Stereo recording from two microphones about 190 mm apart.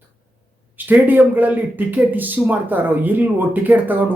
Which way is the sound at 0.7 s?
10° right (ahead or behind).